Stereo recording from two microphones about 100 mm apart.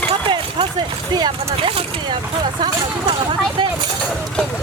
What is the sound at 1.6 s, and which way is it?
Speech, 65° right (ahead or behind).